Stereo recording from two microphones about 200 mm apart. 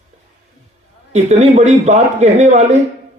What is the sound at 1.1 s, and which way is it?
A man's voice, 35° right (ahead or behind).